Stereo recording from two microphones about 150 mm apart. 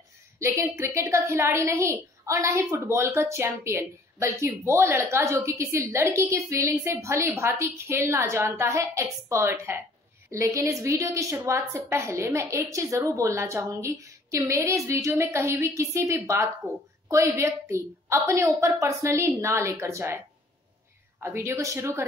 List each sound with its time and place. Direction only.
0.4 s a woman's voice: 20° right (ahead or behind)
21.2 s speech: 15° right (ahead or behind)